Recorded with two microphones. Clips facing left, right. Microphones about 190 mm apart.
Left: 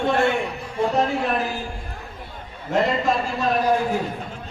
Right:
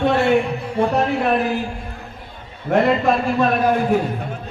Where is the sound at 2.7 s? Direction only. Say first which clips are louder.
Right 5 dB; 60° right (ahead or behind).